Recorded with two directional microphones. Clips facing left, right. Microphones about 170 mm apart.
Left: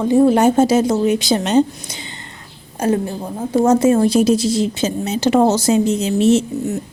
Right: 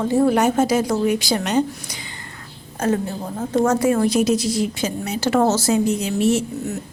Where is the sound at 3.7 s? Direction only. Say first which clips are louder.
Left 6 dB; 25° left (ahead or behind).